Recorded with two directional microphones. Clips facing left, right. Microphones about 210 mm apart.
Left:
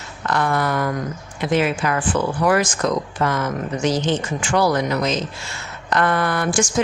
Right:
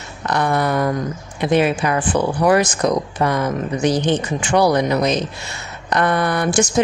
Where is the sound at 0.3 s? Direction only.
20° right (ahead or behind).